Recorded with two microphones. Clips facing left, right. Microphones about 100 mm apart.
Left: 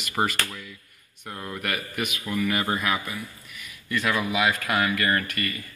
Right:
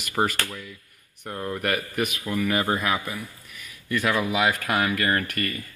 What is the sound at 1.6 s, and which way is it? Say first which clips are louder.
Speech: right 3 dB; 40° right (ahead or behind).